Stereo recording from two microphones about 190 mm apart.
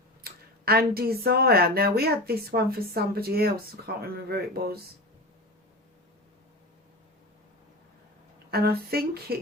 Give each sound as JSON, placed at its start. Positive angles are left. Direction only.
{"t": 0.2, "sound": "speech", "side_deg": -55}
{"t": 8.4, "sound": "speech", "side_deg": -55}